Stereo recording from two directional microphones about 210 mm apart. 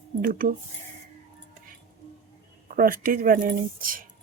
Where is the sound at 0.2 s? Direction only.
40° right (ahead or behind).